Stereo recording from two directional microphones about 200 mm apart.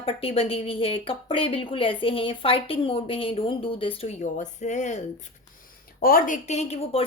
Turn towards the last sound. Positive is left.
turn(degrees=30)  # may be behind; listen again after turning